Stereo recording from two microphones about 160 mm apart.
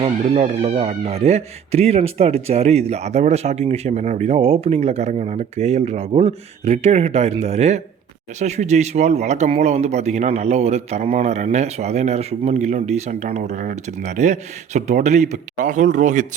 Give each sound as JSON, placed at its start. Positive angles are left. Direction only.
{"t": 0.0, "sound": "a man's voice", "side_deg": -40}